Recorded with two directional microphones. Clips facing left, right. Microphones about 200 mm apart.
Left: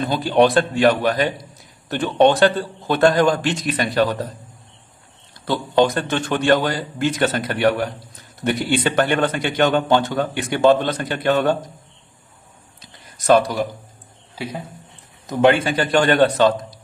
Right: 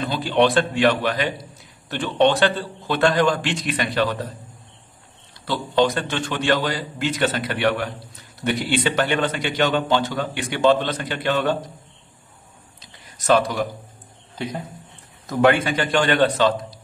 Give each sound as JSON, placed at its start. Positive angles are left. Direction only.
{"t": 0.0, "sound": "a man's voice", "side_deg": 45}
{"t": 5.4, "sound": "a man's voice", "side_deg": 50}
{"t": 14.3, "sound": "a sound", "side_deg": 10}
{"t": 15.2, "sound": "a man's voice", "side_deg": 25}